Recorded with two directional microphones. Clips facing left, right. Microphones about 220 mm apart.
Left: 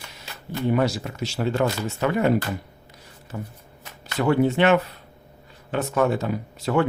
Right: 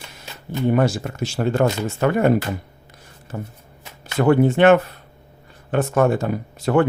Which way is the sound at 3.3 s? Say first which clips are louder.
Right 3 dB; 40° right (ahead or behind).